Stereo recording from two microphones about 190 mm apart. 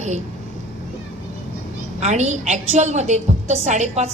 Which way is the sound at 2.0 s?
35° right (ahead or behind).